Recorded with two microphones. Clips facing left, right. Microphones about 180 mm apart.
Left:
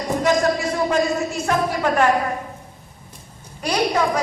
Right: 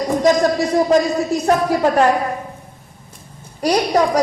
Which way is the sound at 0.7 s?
35° right (ahead or behind).